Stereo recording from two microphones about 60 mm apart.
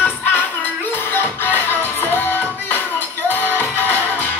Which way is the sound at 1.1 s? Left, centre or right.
Left.